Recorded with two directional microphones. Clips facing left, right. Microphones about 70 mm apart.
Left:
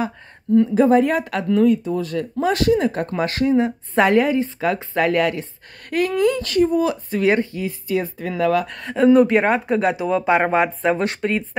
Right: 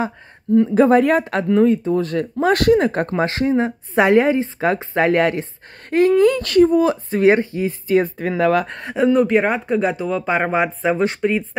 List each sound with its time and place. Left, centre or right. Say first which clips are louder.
0.7 s speech: right 4 dB; right
1.3 s speech: right 1 dB; right
3.1 s a woman's voice: right 1 dB; right
6.2 s speech: right 4 dB; right
8.3 s speech: even; right
8.9 s speech: left 2 dB; centre